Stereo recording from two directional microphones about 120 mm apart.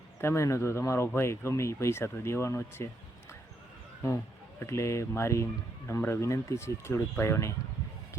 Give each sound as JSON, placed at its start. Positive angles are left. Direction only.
{"t": 0.2, "sound": "speech", "side_deg": 25}
{"t": 4.6, "sound": "speech", "side_deg": 25}